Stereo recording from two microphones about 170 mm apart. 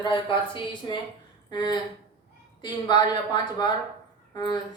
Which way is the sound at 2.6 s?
25° left (ahead or behind).